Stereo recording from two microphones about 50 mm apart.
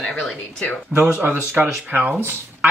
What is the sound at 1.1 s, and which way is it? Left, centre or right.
Speech, right.